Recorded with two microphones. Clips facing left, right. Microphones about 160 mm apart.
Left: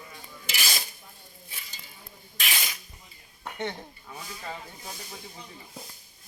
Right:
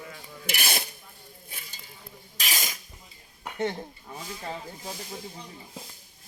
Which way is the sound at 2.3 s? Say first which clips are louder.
Even; 40° right (ahead or behind).